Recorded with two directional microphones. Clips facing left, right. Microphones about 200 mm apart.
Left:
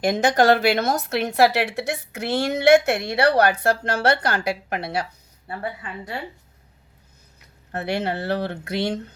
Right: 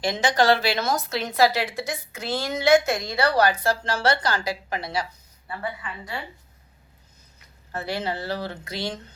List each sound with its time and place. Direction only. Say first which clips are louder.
0.0 s a woman's voice: left 3 dB; 55° left (ahead or behind)
5.5 s a woman's voice: left 2 dB; 45° left (ahead or behind)
7.7 s a woman's voice: left 4 dB; 65° left (ahead or behind)